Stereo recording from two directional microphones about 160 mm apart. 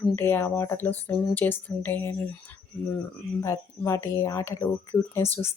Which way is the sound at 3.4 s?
20° left (ahead or behind).